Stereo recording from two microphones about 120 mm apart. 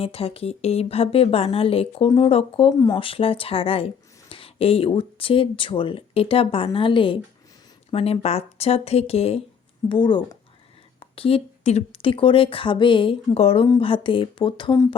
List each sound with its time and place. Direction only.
0.0 s a woman's voice: 55° left (ahead or behind)
2.7 s speech: 30° left (ahead or behind)
3.0 s a woman's voice: 50° left (ahead or behind)
7.9 s speech: 55° left (ahead or behind)
9.9 s a woman's voice: 40° left (ahead or behind)